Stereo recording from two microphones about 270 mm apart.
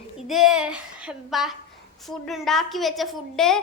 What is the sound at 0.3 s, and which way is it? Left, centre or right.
A woman's voice, centre.